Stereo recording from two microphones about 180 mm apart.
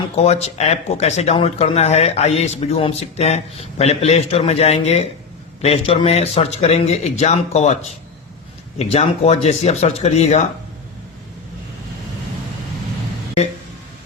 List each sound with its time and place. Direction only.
0.2 s speech: 35° left (ahead or behind)
8.8 s speech: 35° left (ahead or behind)